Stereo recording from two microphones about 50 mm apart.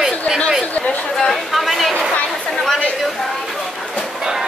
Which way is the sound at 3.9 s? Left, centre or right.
Centre.